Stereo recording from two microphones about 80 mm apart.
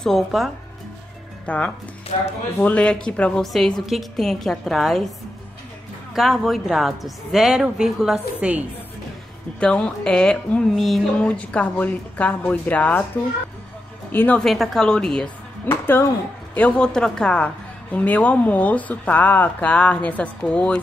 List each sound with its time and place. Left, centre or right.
0.0 s speech: centre
1.4 s speech: centre
6.1 s a woman's voice: centre
8.4 s a woman's voice: centre
9.6 s speech: centre
11.2 s speech: centre
14.1 s speech: left
14.4 s speech: centre
15.6 s speech: left